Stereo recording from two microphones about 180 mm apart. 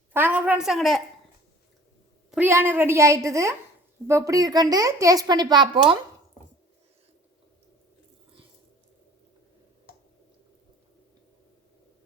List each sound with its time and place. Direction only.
0.1 s a woman's voice: 10° right (ahead or behind)
2.3 s a woman's voice: 10° right (ahead or behind)